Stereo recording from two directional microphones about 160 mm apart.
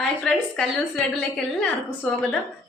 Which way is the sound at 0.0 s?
5° left (ahead or behind).